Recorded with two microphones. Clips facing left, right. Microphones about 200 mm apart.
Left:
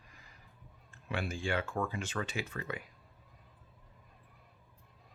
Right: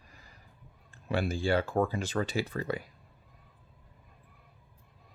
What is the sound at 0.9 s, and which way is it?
Speech, 35° right (ahead or behind).